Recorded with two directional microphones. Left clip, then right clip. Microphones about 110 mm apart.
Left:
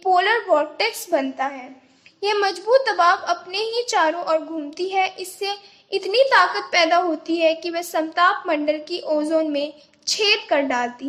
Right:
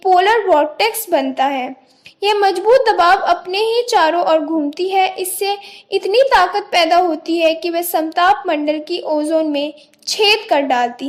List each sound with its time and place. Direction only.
0.0 s a woman's voice: 40° right (ahead or behind)